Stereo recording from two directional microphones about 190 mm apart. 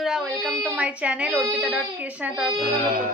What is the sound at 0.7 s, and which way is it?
A woman's voice, 5° right (ahead or behind).